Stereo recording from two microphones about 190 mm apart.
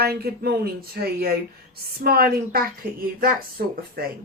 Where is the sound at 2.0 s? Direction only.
55° right (ahead or behind).